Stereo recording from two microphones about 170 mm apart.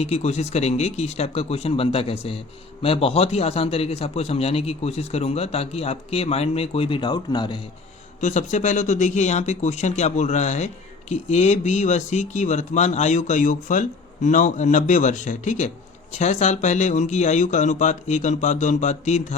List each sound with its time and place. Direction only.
0.0 s a man's voice: 40° left (ahead or behind)
8.2 s speech: 45° left (ahead or behind)